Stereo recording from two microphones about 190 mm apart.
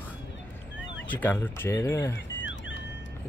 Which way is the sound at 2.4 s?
80° left.